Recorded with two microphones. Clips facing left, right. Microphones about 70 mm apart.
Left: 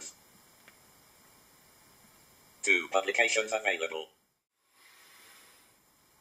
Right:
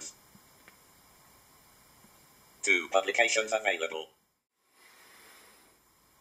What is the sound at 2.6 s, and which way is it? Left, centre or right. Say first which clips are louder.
Speech: right 1 dB; centre.